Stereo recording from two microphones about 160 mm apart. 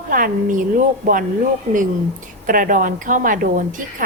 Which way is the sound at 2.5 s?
55° right (ahead or behind).